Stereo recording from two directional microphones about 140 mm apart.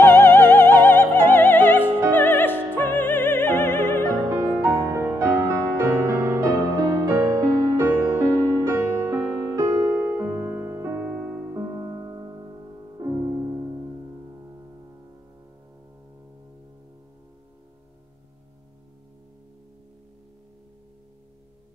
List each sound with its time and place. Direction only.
0.0 s music: 15° left (ahead or behind)
4.3 s music: 20° right (ahead or behind)
11.5 s music: 25° right (ahead or behind)